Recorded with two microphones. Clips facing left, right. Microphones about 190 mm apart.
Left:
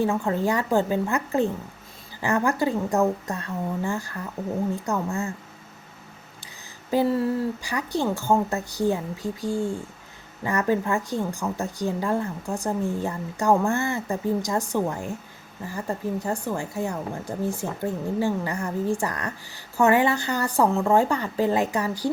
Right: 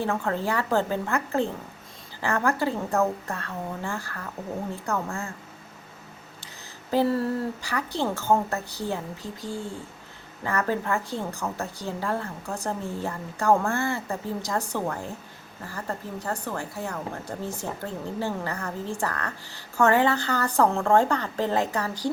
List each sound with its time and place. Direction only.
0.0 s a woman's voice: 15° left (ahead or behind)
6.9 s a woman's voice: 10° left (ahead or behind)